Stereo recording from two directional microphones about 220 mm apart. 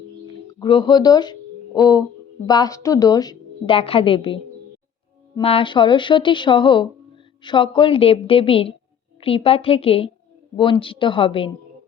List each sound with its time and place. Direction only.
0.6 s a woman's voice: 20° left (ahead or behind)
5.4 s a woman's voice: 25° left (ahead or behind)